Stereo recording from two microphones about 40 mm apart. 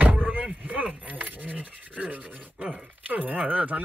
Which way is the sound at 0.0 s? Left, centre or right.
Right.